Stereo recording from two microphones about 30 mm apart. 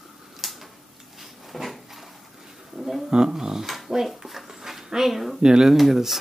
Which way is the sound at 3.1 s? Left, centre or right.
Right.